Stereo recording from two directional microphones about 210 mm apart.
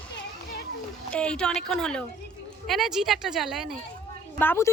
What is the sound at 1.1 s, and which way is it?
A woman's voice, 5° left (ahead or behind).